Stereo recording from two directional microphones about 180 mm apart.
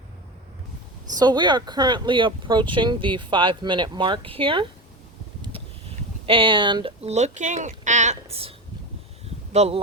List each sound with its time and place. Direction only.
1.1 s speech: 25° right (ahead or behind)